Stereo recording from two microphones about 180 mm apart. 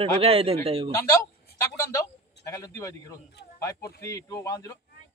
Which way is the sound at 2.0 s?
15° left (ahead or behind).